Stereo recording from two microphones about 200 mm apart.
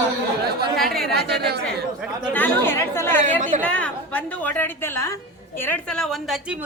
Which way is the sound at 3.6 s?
5° left (ahead or behind).